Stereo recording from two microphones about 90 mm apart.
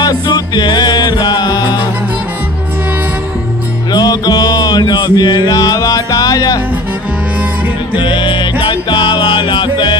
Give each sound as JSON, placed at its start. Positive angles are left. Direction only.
{"t": 0.0, "sound": "music", "side_deg": 50}
{"t": 3.9, "sound": "music", "side_deg": 45}
{"t": 7.9, "sound": "music", "side_deg": 65}